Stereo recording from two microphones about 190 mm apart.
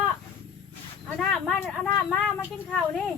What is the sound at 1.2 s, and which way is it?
Speech, 5° left (ahead or behind).